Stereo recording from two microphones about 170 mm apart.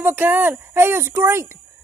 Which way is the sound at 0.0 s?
10° right (ahead or behind).